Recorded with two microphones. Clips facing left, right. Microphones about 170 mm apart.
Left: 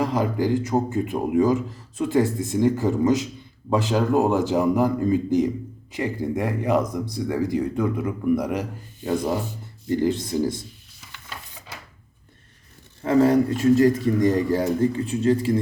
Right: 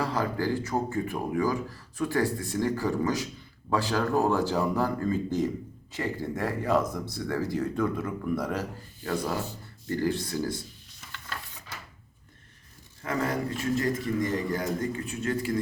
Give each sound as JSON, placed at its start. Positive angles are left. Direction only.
{"t": 0.0, "sound": "speech", "side_deg": 20}
{"t": 13.0, "sound": "speech", "side_deg": 30}